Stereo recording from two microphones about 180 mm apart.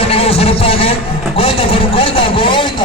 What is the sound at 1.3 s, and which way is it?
Vehicle, 30° left (ahead or behind).